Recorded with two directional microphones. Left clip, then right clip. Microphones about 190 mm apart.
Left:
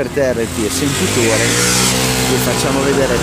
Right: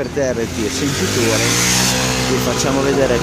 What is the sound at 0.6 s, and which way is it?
Speech, 50° right (ahead or behind).